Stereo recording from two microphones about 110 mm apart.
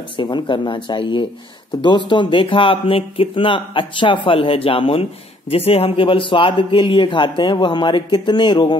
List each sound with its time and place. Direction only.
0.2 s speech: 45° left (ahead or behind)